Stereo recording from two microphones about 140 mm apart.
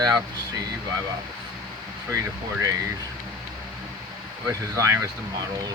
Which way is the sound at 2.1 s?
20° right (ahead or behind).